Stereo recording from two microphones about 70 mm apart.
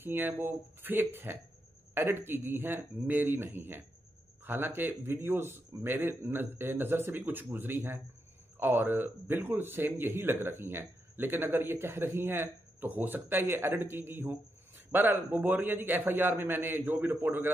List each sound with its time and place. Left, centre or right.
0.0 s a man's voice: right